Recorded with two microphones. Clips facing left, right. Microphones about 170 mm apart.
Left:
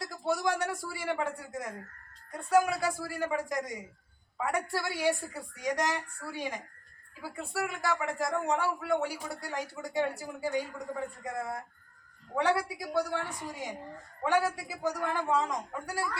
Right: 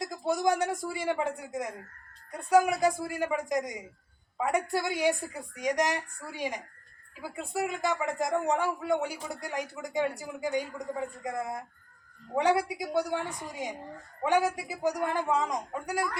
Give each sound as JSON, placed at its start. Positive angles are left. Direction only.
{"t": 0.0, "sound": "a woman's voice", "side_deg": -20}